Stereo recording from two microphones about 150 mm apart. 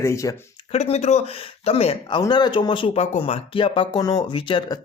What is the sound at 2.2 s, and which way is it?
Speech, 30° left (ahead or behind).